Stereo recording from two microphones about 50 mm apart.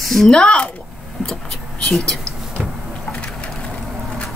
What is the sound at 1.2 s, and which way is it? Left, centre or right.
Vehicle, centre.